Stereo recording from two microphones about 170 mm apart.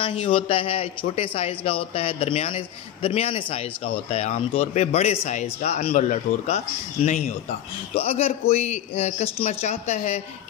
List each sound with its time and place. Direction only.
0.0 s speech: 35° left (ahead or behind)